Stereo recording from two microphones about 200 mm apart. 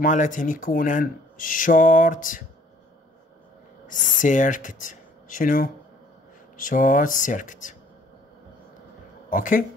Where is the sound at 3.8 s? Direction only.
40° left (ahead or behind).